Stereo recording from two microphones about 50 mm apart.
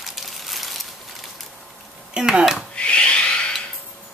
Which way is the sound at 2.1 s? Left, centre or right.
Centre.